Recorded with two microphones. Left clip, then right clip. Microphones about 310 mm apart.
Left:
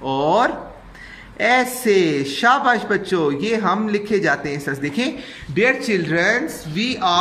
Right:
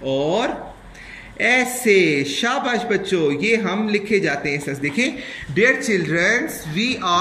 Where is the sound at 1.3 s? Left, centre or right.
Left.